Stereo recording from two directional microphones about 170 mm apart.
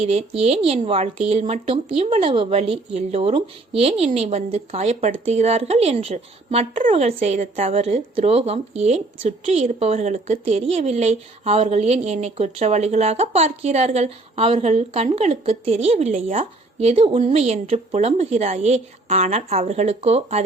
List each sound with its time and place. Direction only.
0.0 s speech: 40° right (ahead or behind)